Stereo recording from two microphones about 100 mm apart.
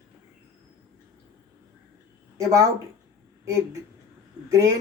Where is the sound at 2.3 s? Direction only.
35° right (ahead or behind).